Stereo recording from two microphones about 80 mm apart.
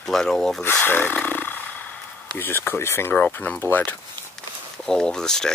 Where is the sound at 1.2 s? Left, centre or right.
Left.